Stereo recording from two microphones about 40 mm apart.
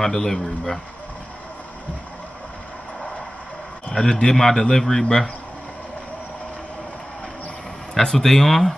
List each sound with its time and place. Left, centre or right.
0.0 s a man's voice: centre
3.9 s a man's voice: centre
8.0 s a man's voice: centre